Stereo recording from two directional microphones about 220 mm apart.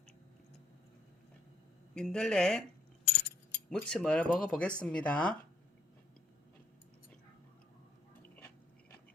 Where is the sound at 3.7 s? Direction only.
5° left (ahead or behind).